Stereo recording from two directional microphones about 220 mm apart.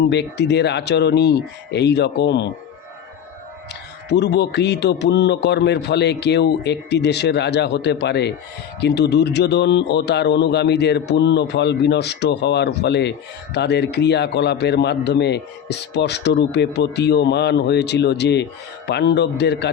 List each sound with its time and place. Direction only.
0.1 s a man's voice: 50° left (ahead or behind)
3.7 s a man's voice: 50° left (ahead or behind)